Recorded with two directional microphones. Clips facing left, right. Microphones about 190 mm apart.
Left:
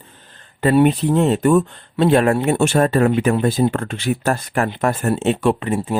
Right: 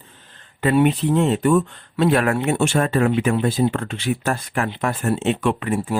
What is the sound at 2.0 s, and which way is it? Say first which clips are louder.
Speech: left 3 dB; 30° left (ahead or behind).